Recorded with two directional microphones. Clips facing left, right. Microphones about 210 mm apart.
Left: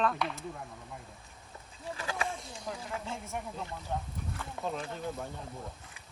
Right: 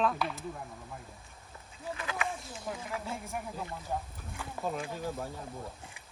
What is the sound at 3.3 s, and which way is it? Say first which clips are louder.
Speech: even; 5° right (ahead or behind).